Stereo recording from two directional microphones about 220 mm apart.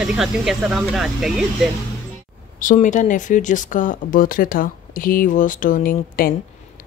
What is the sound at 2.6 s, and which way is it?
Speech, 35° left (ahead or behind).